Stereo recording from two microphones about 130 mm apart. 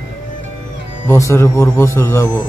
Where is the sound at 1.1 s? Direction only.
20° left (ahead or behind).